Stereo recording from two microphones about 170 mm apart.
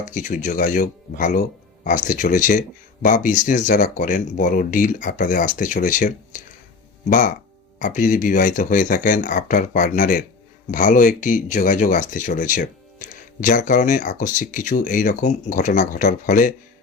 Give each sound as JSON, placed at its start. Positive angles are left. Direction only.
{"t": 0.0, "sound": "speech", "side_deg": 50}